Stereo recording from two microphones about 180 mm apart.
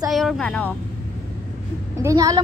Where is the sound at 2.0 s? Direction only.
20° right (ahead or behind).